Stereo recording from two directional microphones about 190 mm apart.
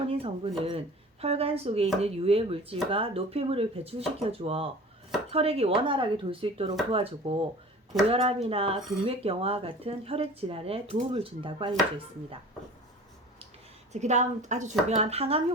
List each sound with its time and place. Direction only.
0.1 s speech: 30° right (ahead or behind)
13.9 s speech: 35° right (ahead or behind)